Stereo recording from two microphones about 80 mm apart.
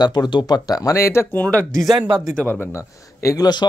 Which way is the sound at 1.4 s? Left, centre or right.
Centre.